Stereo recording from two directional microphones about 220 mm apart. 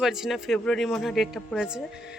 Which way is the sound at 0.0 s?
Centre (ahead or behind).